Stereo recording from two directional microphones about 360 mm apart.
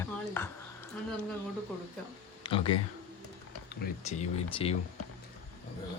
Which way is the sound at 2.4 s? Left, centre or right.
Centre.